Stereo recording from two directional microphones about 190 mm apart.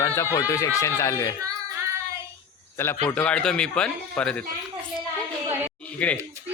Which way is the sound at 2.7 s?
15° left (ahead or behind).